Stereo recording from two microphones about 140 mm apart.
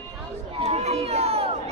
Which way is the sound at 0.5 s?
50° right (ahead or behind).